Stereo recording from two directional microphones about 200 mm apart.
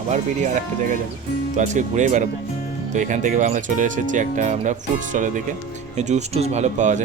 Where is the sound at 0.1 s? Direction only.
40° right (ahead or behind).